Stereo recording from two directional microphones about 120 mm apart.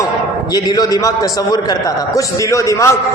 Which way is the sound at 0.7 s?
30° left (ahead or behind).